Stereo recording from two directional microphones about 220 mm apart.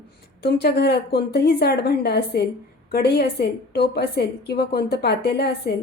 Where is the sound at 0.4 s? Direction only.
50° left (ahead or behind).